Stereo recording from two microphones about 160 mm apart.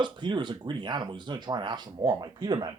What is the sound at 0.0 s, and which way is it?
Speech, 30° right (ahead or behind).